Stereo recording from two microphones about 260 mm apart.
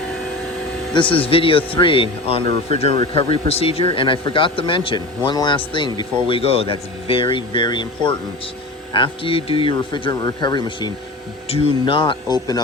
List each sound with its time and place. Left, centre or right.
0.9 s speech: centre
2.4 s speech: right
2.7 s speech: left